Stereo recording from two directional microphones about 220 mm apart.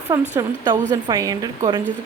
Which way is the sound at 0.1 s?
20° right (ahead or behind).